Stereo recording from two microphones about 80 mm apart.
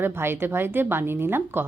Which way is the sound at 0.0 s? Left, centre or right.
Right.